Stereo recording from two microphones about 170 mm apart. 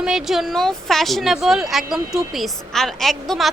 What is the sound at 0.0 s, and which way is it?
A woman's voice, 5° right (ahead or behind).